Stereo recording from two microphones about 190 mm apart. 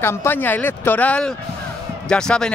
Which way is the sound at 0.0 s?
15° left (ahead or behind).